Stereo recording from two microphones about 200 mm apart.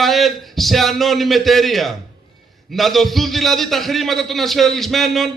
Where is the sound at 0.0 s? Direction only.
Centre (ahead or behind).